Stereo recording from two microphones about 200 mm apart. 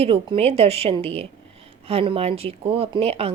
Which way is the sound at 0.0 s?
30° right (ahead or behind).